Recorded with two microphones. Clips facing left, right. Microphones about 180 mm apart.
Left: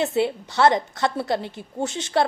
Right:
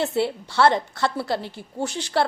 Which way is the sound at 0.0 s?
20° left (ahead or behind).